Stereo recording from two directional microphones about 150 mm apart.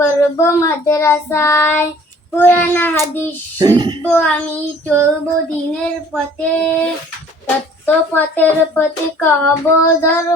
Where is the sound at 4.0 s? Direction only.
10° left (ahead or behind).